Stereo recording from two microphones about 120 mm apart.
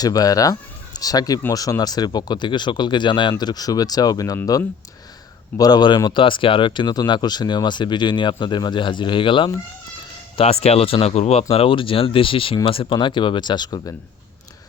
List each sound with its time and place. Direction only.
0.0 s speech: 30° left (ahead or behind)
5.5 s speech: 35° left (ahead or behind)
10.3 s speech: 55° left (ahead or behind); by 13.9 s 35° left (ahead or behind)